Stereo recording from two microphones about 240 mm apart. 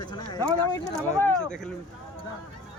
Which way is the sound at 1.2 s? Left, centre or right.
Centre.